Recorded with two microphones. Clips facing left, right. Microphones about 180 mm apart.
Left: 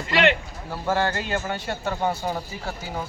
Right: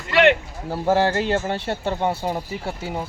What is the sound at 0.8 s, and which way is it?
A man's voice, 35° right (ahead or behind).